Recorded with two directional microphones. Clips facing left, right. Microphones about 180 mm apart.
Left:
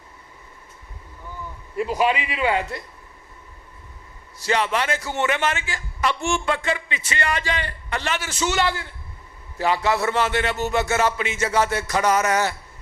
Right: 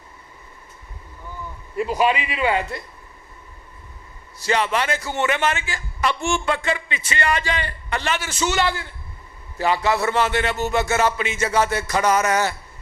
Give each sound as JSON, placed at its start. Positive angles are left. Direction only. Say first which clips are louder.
{"t": 1.8, "sound": "a man's voice", "louder": "right 1 dB", "side_deg": -25}
{"t": 4.4, "sound": "a man's voice", "louder": "right 1 dB", "side_deg": -20}